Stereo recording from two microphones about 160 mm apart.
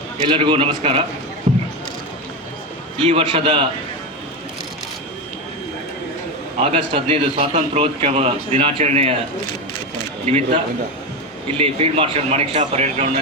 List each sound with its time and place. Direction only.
0.3 s a man's voice: 30° right (ahead or behind)
1.5 s basketball bounce: 50° right (ahead or behind)
3.0 s a man's voice: 35° right (ahead or behind)
6.6 s a man's voice: 35° right (ahead or behind)
10.2 s a man's voice: 40° right (ahead or behind)